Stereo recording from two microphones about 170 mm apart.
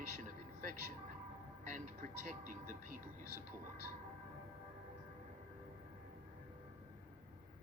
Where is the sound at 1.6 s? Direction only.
50° right (ahead or behind).